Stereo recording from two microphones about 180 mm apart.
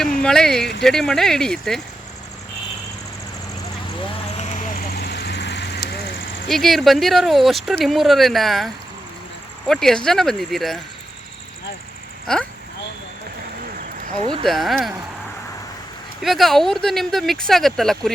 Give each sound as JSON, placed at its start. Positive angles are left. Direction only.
{"t": 0.2, "sound": "speech", "side_deg": 5}
{"t": 4.4, "sound": "vehicle", "side_deg": 40}
{"t": 4.9, "sound": "vehicle", "side_deg": 65}
{"t": 6.5, "sound": "speech", "side_deg": 0}
{"t": 12.3, "sound": "speech", "side_deg": 5}
{"t": 14.4, "sound": "speech", "side_deg": 0}
{"t": 16.2, "sound": "speech", "side_deg": 0}